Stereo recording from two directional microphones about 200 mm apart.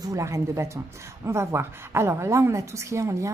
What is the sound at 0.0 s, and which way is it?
A woman's voice, 15° right (ahead or behind).